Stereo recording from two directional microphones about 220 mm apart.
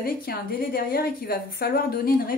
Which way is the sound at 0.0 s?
45° left (ahead or behind).